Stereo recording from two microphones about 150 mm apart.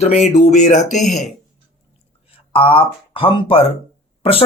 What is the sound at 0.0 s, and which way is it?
Speech, 50° left (ahead or behind).